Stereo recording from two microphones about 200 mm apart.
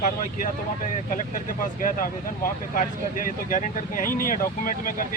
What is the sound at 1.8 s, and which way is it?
Speech, 40° left (ahead or behind).